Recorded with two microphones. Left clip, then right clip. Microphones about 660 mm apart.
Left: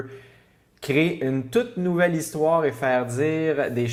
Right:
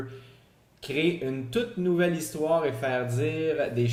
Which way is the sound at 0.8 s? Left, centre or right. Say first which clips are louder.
Left 5 dB; left.